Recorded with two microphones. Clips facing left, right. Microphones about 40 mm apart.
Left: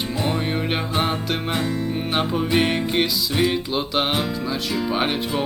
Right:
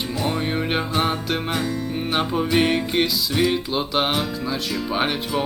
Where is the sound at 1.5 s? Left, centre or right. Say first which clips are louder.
Left 2 dB; centre.